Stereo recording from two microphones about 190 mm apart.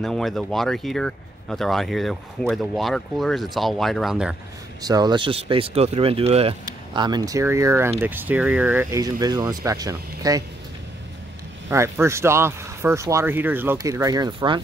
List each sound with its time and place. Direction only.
0.0 s speech: centre (ahead or behind)
4.8 s speech: 20° right (ahead or behind)
11.7 s speech: 15° right (ahead or behind)